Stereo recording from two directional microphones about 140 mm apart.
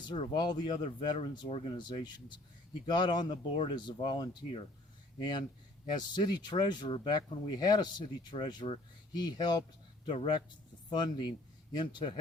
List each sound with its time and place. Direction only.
0.0 s speech: 35° left (ahead or behind)
5.9 s speech: 30° left (ahead or behind)